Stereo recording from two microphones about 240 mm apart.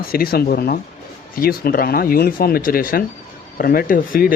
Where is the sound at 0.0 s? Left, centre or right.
Left.